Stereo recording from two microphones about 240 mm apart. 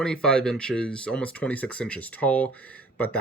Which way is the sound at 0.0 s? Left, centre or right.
Centre.